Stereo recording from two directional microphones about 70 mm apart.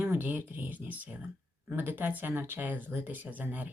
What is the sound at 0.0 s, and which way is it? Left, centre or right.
Speech, right.